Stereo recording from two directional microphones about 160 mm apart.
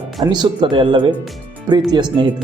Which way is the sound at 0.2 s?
30° right (ahead or behind).